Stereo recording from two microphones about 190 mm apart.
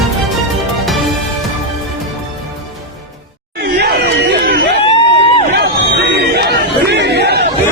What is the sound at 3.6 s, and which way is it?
Chatter, 55° right (ahead or behind).